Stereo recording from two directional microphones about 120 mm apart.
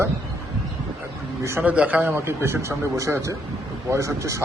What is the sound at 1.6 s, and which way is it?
Speech, 10° right (ahead or behind).